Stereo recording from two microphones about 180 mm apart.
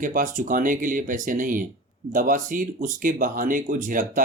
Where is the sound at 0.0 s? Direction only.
50° right (ahead or behind).